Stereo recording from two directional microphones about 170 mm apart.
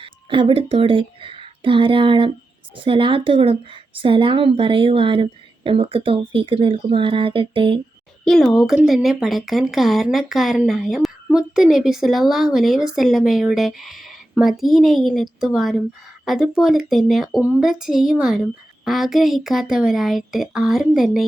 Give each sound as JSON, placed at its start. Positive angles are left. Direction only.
{"t": 0.0, "sound": "a woman's voice", "side_deg": -30}
{"t": 8.2, "sound": "speech", "side_deg": 0}